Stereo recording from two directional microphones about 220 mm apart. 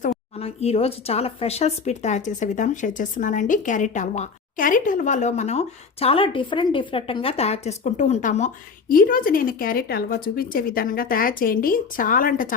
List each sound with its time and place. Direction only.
0.0 s speech: 30° left (ahead or behind)